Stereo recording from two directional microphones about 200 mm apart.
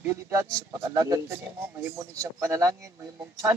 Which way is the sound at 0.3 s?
15° right (ahead or behind).